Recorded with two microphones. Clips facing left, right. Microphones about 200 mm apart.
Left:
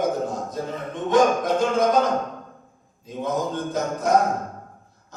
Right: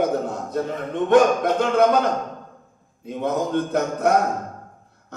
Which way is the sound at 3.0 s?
60° right (ahead or behind).